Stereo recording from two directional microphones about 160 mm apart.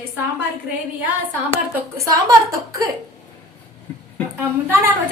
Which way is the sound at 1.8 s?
20° right (ahead or behind).